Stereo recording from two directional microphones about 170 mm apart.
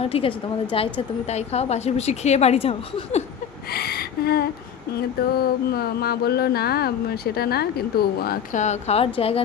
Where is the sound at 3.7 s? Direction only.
65° left (ahead or behind).